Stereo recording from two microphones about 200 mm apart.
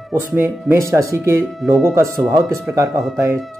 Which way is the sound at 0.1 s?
10° right (ahead or behind).